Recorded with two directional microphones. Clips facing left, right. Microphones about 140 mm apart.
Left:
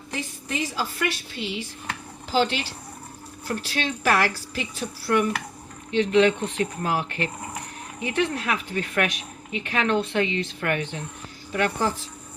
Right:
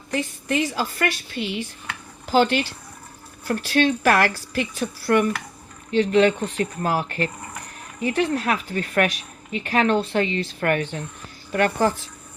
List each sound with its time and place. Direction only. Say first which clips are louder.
0.1 s a woman's voice: right 7 dB; 60° right (ahead or behind)
5.9 s speech: right 2 dB; 40° right (ahead or behind)